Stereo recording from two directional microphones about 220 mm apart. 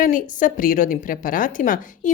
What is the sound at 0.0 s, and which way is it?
Speech, 40° left (ahead or behind).